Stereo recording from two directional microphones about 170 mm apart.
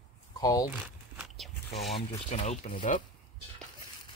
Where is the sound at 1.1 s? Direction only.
Centre (ahead or behind).